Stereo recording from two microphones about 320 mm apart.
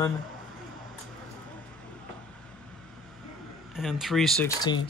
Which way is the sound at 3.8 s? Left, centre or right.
Centre.